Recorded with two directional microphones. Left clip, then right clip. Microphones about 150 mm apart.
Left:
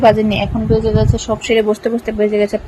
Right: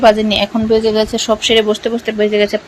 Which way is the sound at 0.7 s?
15° right (ahead or behind).